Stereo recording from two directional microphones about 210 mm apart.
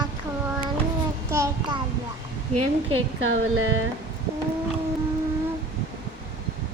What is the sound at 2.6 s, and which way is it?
A woman's voice, 90° right.